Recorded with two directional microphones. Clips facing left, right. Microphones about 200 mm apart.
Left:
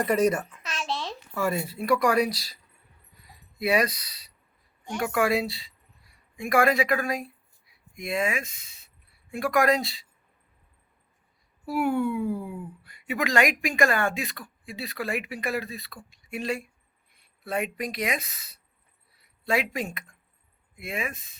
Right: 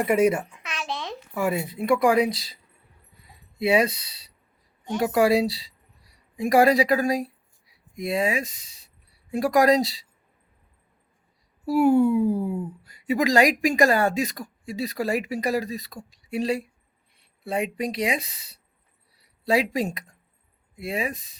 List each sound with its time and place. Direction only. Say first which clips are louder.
0.0 s a child's voice: right 3 dB; 10° right (ahead or behind)
0.5 s a sound: even; 15° right (ahead or behind)
3.6 s speech: right 3 dB; 25° right (ahead or behind)
11.6 s speech: right 7 dB; 40° right (ahead or behind)